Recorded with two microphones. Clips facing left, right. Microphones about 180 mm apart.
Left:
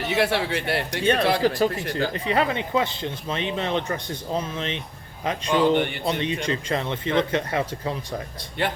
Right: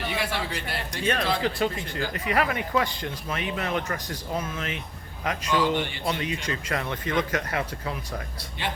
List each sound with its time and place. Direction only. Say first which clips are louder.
0.2 s a man's voice: left 7 dB; 65° left (ahead or behind)
1.0 s speech: left 5 dB; 30° left (ahead or behind)